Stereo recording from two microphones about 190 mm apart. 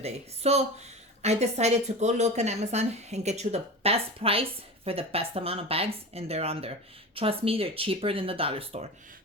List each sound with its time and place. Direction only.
0.0 s a woman's voice: 35° right (ahead or behind)